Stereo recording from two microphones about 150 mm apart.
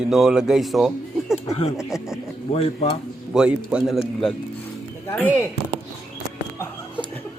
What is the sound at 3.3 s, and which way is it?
Speech, 5° right (ahead or behind).